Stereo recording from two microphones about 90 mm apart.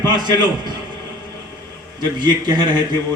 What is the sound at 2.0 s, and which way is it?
Speech, 55° right (ahead or behind).